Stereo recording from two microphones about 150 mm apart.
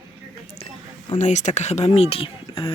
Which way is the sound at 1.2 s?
50° left (ahead or behind).